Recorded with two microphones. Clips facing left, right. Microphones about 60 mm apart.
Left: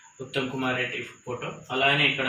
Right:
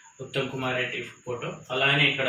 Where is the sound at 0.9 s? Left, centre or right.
Centre.